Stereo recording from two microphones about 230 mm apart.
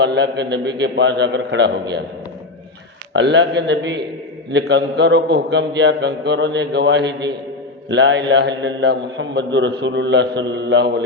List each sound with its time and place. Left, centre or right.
0.0 s a man's voice: right
3.1 s a man's voice: right